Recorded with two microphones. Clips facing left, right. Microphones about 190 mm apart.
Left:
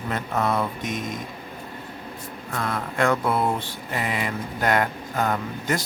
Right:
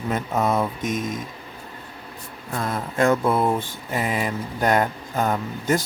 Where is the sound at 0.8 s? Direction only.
45° right (ahead or behind).